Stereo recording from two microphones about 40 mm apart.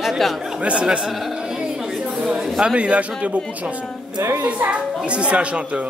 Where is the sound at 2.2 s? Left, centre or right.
Right.